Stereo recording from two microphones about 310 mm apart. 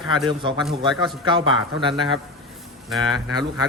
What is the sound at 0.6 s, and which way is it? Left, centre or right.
Speech, centre.